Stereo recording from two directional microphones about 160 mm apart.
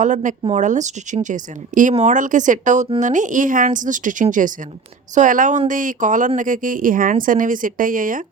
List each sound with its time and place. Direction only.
0.0 s speech: 50° right (ahead or behind)